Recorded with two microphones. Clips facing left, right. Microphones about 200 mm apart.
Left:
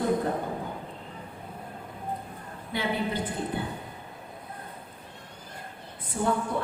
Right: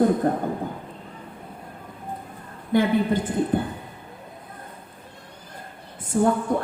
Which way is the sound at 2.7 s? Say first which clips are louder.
Right 12 dB; 50° right (ahead or behind).